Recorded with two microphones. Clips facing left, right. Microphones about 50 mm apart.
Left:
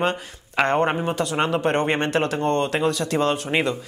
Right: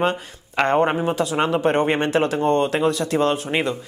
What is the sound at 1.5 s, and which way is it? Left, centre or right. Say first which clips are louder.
Speech: right 2 dB; right.